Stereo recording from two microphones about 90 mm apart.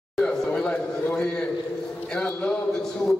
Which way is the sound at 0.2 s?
10° left (ahead or behind).